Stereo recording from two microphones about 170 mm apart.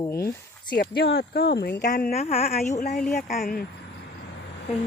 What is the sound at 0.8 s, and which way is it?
Speech, 70° left (ahead or behind).